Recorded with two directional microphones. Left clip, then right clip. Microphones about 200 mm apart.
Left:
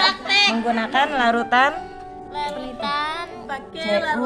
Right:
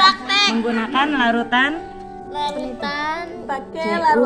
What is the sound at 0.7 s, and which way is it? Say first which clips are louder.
A woman's voice: right 1 dB; 30° left (ahead or behind).